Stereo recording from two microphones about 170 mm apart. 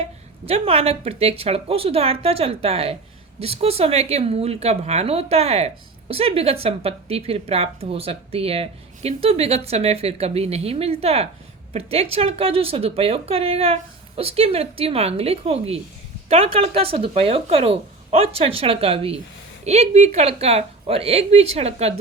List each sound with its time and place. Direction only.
0.0 s speech: 35° right (ahead or behind)